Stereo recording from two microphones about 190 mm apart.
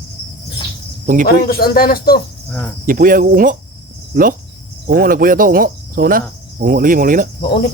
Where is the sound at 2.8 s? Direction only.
45° right (ahead or behind).